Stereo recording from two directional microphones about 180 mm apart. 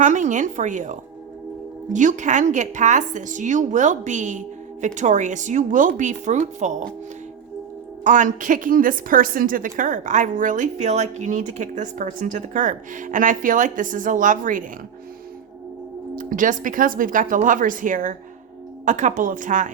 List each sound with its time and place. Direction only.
0.0 s a woman's voice: 45° right (ahead or behind)
8.0 s a woman's voice: 45° right (ahead or behind)
16.1 s a woman's voice: 50° right (ahead or behind)